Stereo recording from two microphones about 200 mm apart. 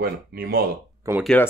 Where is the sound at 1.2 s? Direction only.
5° left (ahead or behind).